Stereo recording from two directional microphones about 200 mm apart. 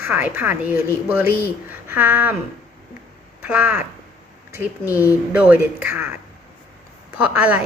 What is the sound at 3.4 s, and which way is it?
Speech, 10° right (ahead or behind).